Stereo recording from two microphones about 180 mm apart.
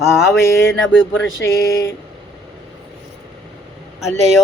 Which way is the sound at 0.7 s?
90° left.